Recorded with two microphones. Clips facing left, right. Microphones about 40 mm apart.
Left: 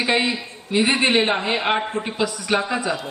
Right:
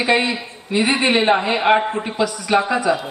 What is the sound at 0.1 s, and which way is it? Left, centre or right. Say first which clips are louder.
A man's voice: right 3 dB; centre.